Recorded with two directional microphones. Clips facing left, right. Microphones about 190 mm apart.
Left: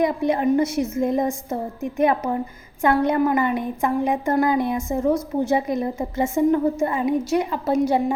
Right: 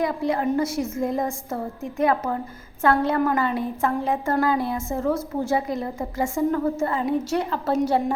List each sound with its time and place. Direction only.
0.0 s a woman's voice: 20° left (ahead or behind)